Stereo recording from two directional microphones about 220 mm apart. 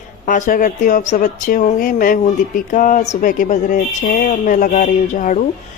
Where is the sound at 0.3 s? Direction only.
35° left (ahead or behind).